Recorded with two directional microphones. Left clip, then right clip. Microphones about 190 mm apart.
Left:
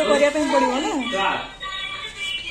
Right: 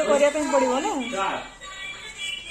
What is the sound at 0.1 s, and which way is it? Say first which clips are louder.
Speech: left 1 dB; 45° right (ahead or behind).